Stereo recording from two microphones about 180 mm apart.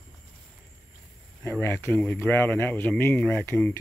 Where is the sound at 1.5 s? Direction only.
10° left (ahead or behind).